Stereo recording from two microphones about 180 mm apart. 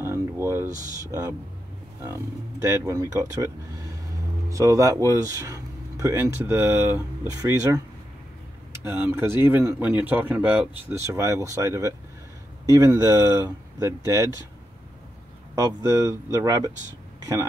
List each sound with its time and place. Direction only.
0.0 s a sound: 15° right (ahead or behind)
2.0 s speech: 15° right (ahead or behind)
15.5 s speech: 15° right (ahead or behind)